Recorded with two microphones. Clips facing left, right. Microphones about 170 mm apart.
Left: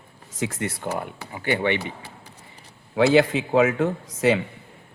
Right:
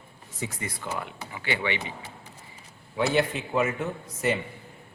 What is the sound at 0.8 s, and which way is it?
Speech, 50° left (ahead or behind).